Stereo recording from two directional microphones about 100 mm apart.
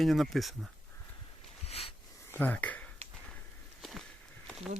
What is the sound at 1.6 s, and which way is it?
Wheeze, 90° left.